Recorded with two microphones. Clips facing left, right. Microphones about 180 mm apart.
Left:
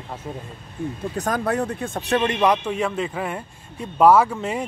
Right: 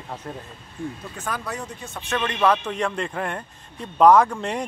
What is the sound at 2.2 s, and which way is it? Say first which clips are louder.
A man's voice: right 1 dB; 20° left (ahead or behind).